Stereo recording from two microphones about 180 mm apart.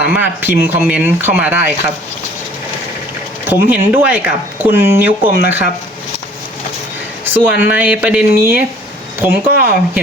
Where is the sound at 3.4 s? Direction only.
10° right (ahead or behind).